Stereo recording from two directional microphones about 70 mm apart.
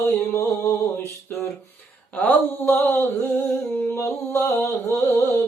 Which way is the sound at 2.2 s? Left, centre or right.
Left.